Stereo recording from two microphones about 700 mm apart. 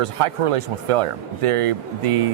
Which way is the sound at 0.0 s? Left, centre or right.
Right.